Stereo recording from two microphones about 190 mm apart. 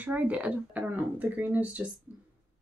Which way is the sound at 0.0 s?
10° right (ahead or behind).